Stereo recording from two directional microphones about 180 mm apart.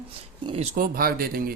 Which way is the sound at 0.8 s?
55° right (ahead or behind).